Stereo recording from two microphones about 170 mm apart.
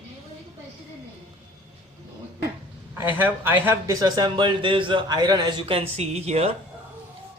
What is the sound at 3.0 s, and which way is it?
Speech, 10° right (ahead or behind).